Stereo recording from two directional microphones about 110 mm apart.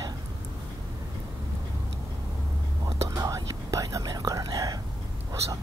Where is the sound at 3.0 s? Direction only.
30° right (ahead or behind).